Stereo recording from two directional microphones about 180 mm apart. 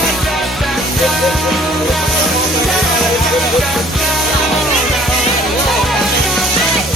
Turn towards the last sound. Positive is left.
turn(degrees=0)  # may be behind; listen again after turning